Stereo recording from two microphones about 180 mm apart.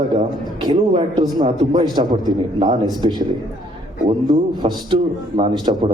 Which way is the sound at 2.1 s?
25° right (ahead or behind).